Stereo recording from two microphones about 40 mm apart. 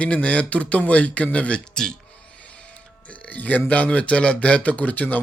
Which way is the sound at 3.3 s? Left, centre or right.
Left.